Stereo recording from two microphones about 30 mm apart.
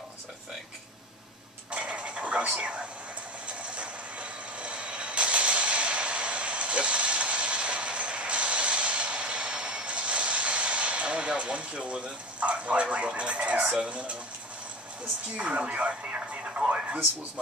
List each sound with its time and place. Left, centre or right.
1.7 s vehicle: right
3.4 s vehicle: right
13.8 s speech: right
15.3 s a woman's voice: right
16.6 s a woman's voice: right